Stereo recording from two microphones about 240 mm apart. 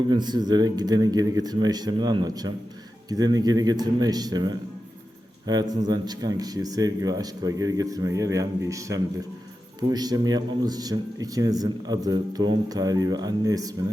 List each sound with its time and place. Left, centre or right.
0.1 s a man's voice: centre